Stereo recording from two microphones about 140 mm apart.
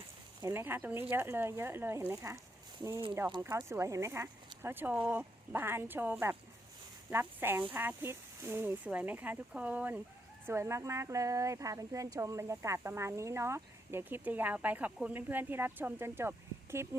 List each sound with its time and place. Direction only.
0.4 s speech: 15° right (ahead or behind)
3.4 s speech: 20° right (ahead or behind)